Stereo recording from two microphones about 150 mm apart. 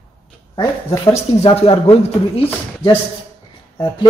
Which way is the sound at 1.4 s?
40° left (ahead or behind).